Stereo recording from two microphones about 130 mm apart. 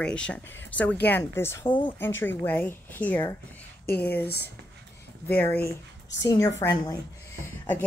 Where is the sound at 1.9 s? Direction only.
15° left (ahead or behind).